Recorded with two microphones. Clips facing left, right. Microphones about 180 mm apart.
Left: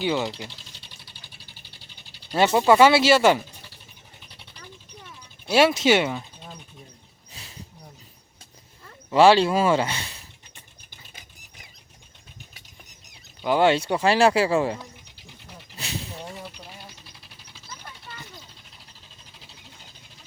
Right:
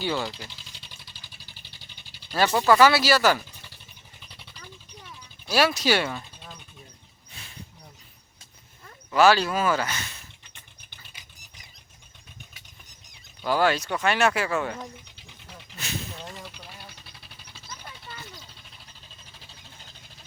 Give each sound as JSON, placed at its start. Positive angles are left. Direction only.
{"t": 0.0, "sound": "speech", "side_deg": 20}
{"t": 2.3, "sound": "speech", "side_deg": 20}
{"t": 5.5, "sound": "speech", "side_deg": 25}
{"t": 9.0, "sound": "speech", "side_deg": 30}
{"t": 13.4, "sound": "speech", "side_deg": 20}